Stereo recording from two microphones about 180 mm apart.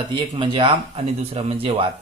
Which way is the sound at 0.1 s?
25° right (ahead or behind).